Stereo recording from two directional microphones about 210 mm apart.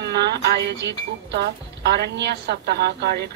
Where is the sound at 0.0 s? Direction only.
50° right (ahead or behind).